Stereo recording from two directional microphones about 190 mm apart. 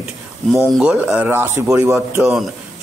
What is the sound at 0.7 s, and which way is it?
Speech, 5° right (ahead or behind).